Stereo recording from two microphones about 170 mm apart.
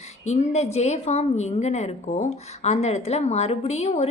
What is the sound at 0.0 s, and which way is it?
A woman's voice, 40° left (ahead or behind).